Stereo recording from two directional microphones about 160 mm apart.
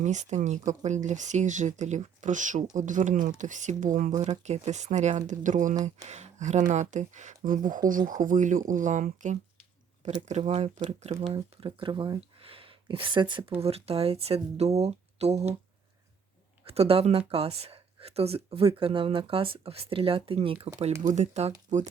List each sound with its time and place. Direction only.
0.0 s speech: 50° right (ahead or behind)
10.8 s speech: 35° right (ahead or behind)
16.6 s speech: 40° right (ahead or behind)